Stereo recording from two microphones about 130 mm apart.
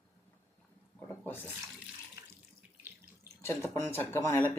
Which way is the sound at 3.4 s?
20° left (ahead or behind).